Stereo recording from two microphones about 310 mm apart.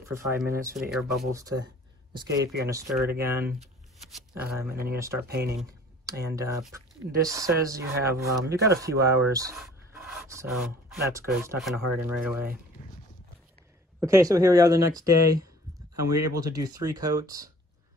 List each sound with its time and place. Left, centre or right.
0.0 s speech: centre
2.1 s speech: centre
5.3 s speech: right
5.6 s speech: centre
9.6 s a sound: centre
11.2 s speech: centre
12.8 s clip-clop: left
13.9 s speech: centre